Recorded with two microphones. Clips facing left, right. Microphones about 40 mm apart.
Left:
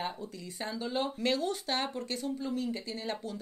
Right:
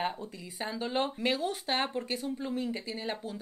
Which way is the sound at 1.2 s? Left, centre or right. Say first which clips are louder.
Even; centre.